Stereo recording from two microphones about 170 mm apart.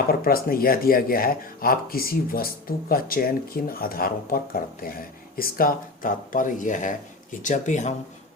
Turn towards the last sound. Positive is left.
turn(degrees=45)  # may be behind; listen again after turning